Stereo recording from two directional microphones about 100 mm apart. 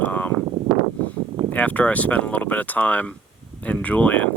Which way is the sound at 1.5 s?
15° left (ahead or behind).